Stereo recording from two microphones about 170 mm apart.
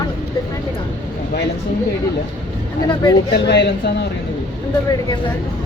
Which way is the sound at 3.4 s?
80° left.